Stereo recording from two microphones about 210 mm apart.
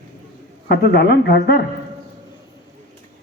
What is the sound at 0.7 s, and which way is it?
Speech, 50° left (ahead or behind).